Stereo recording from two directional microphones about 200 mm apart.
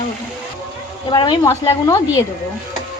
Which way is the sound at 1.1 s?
20° left (ahead or behind).